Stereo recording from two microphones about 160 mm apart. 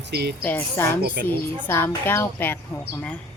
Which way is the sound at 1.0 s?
65° right (ahead or behind).